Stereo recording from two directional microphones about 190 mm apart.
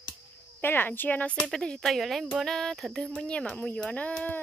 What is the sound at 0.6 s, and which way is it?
Speech, 10° left (ahead or behind).